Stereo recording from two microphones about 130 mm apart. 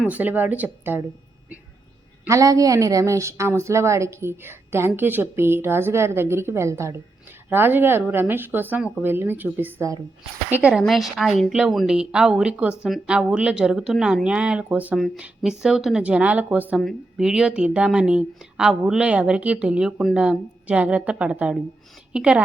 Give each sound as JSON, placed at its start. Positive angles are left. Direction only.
{"t": 0.0, "sound": "speech", "side_deg": -10}
{"t": 2.2, "sound": "a woman's voice", "side_deg": -25}
{"t": 10.5, "sound": "a woman's voice", "side_deg": -10}